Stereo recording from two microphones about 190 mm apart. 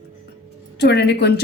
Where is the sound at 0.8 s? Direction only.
60° left (ahead or behind).